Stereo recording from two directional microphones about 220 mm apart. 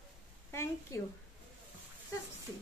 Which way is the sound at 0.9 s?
15° left (ahead or behind).